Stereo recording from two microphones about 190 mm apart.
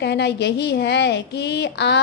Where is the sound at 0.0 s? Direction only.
60° left (ahead or behind).